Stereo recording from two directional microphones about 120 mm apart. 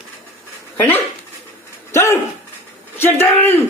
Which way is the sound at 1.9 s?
20° left (ahead or behind).